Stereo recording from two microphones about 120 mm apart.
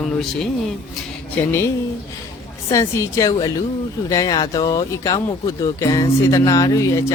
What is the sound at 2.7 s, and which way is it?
Speech, 25° left (ahead or behind).